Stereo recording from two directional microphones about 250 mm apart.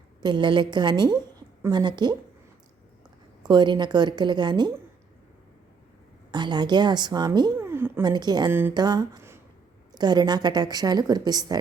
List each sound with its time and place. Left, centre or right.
0.2 s a woman's voice: centre
3.4 s a woman's voice: centre
6.3 s a woman's voice: centre